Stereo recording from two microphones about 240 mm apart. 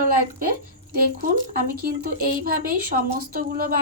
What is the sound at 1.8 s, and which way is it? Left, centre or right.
Speech, right.